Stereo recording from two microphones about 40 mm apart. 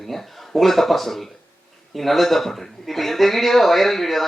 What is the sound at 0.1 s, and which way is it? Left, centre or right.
Speech, centre.